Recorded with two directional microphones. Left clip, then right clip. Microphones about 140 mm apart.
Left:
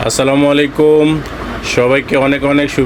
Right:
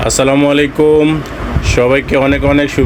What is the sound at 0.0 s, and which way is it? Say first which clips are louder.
Speech: right 1 dB; centre (ahead or behind).